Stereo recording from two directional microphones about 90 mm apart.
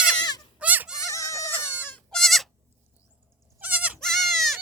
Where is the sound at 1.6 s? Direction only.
20° left (ahead or behind).